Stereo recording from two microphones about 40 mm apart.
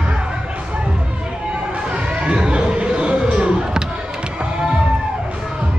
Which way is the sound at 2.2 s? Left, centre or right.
Right.